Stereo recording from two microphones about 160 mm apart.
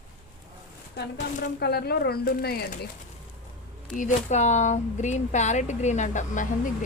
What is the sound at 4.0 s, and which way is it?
Speech, 45° left (ahead or behind).